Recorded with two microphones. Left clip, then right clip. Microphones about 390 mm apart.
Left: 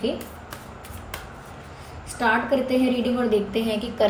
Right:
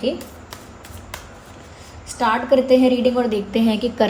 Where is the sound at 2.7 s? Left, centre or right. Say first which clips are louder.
Right 8 dB; right.